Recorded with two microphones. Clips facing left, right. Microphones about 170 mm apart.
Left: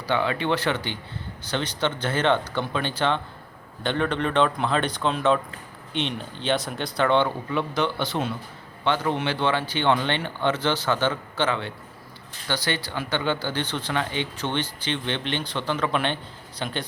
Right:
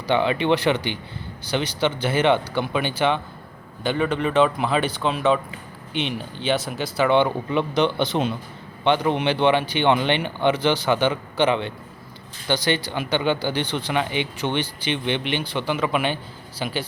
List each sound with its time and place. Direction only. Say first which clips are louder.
0.1 s speech: right 4 dB; 20° right (ahead or behind)